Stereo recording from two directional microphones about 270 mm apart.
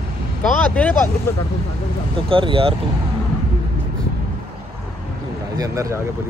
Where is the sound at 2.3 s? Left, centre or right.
Centre.